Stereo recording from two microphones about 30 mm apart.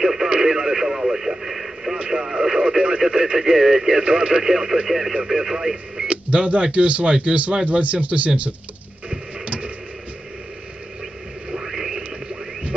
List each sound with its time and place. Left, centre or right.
0.0 s radio: centre
3.5 s speech: centre
4.0 s speech: right
4.4 s speech: centre
4.8 s speech: centre
5.2 s radio: centre
6.0 s speech: right
9.4 s tick-tock: right
11.5 s a sound: centre